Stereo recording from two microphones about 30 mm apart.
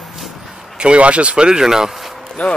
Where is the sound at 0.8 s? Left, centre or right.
Right.